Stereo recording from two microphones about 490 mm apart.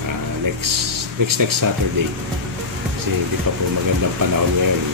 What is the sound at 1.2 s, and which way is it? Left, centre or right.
Speech, right.